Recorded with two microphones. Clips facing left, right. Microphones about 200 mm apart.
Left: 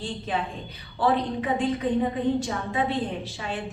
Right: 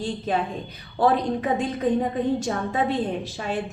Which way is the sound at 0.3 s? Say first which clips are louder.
Right 4 dB; 40° right (ahead or behind).